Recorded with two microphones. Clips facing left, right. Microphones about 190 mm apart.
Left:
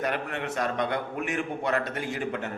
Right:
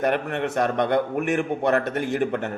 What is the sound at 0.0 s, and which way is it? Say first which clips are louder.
A man's voice: right 7 dB; 60° right (ahead or behind).